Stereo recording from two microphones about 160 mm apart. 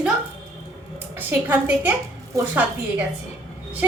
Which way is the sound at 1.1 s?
10° right (ahead or behind).